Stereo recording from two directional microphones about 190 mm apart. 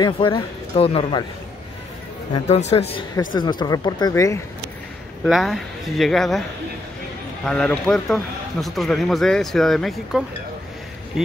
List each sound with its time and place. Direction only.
0.0 s speech: 25° left (ahead or behind)
2.4 s speech: 35° left (ahead or behind); by 4.4 s 15° left (ahead or behind)
5.2 s a man's voice: centre (ahead or behind)
7.4 s a man's voice: 5° left (ahead or behind)